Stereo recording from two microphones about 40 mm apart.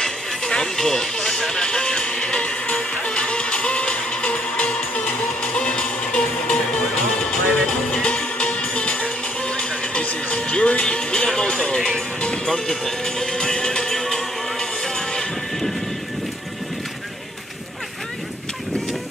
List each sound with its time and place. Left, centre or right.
0.0 s music: left
12.4 s music: centre